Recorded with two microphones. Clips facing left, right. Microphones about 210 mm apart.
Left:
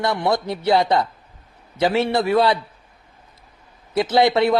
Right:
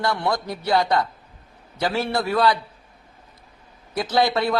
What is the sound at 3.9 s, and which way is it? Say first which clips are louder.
Speech: left 4 dB; 20° left (ahead or behind).